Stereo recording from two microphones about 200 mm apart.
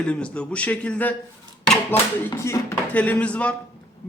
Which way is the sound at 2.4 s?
15° left (ahead or behind).